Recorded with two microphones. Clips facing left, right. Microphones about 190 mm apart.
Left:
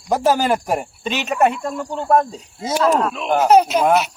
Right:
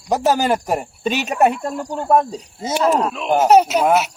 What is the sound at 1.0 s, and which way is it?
Speech, 40° right (ahead or behind).